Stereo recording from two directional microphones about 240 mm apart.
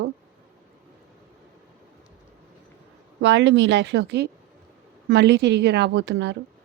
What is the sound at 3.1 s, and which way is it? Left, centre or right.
Speech, right.